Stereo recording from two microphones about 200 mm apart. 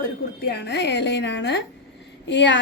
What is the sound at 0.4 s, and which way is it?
A woman's voice, 55° left (ahead or behind).